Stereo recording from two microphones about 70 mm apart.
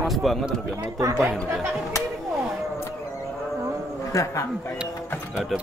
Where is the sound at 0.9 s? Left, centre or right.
Right.